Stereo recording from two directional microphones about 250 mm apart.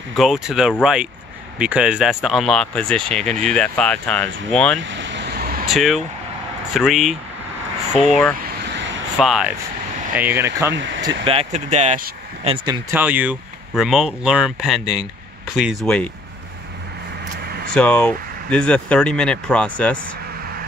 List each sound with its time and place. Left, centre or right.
0.1 s speech: centre
4.7 s vehicle: right
5.7 s speech: centre
8.6 s vehicle: right
9.2 s speech: centre
10.7 s speech: right
11.0 s speech: right
12.9 s speech: centre
17.7 s speech: centre